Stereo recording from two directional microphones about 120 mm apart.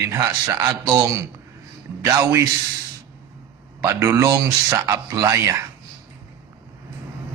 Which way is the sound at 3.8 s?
25° right (ahead or behind).